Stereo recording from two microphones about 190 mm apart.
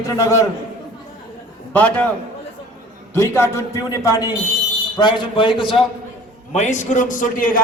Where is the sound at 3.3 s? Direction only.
15° left (ahead or behind).